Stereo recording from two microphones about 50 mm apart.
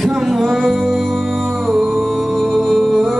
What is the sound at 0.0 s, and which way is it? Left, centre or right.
Music, centre.